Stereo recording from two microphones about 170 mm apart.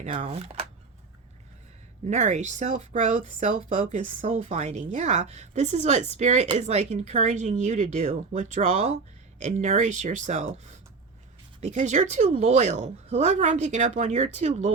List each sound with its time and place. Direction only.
0.0 s speech: 35° right (ahead or behind)
2.0 s speech: 45° right (ahead or behind)
11.6 s speech: 45° right (ahead or behind)